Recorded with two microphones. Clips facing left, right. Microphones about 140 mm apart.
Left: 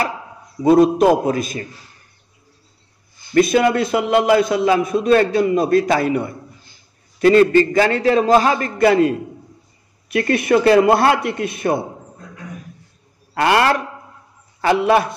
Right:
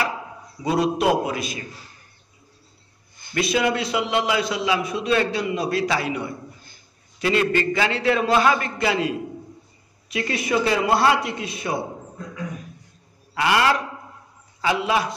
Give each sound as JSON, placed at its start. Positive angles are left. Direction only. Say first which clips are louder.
{"t": 0.7, "sound": "a man's voice", "louder": "left 8 dB", "side_deg": 50}
{"t": 3.3, "sound": "a man's voice", "louder": "left 8 dB", "side_deg": 50}
{"t": 8.7, "sound": "a man's voice", "louder": "left 9 dB", "side_deg": 50}
{"t": 13.3, "sound": "a man's voice", "louder": "left 4 dB", "side_deg": 55}